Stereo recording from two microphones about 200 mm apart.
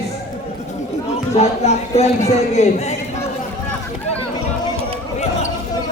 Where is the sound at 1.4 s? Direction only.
35° left (ahead or behind).